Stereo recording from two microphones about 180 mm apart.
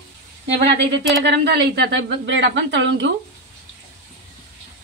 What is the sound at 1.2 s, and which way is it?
Speech, 70° right (ahead or behind).